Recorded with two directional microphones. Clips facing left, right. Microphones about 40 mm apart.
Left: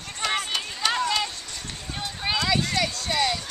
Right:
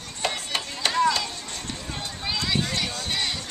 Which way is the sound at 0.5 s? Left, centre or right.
Right.